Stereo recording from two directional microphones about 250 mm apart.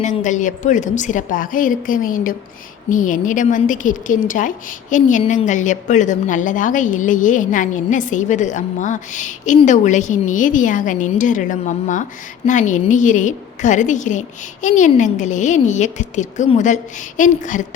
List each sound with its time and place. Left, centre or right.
0.0 s a woman's voice: left